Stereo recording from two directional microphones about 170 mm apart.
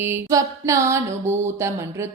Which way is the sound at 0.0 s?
15° right (ahead or behind).